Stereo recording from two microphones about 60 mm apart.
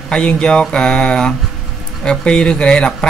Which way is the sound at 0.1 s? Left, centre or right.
Centre.